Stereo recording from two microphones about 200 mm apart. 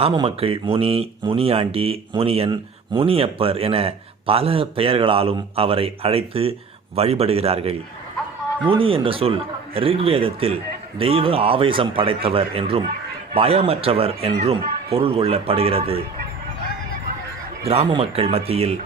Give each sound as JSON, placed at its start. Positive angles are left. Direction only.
{"t": 0.0, "sound": "speech", "side_deg": -25}
{"t": 17.7, "sound": "speech", "side_deg": -30}